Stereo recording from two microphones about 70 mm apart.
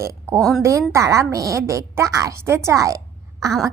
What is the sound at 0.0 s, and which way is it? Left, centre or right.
A woman's voice, right.